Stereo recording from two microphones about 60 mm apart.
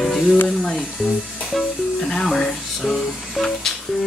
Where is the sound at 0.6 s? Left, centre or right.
Centre.